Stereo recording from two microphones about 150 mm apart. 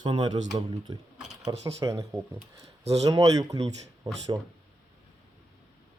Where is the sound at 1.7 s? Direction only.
20° right (ahead or behind).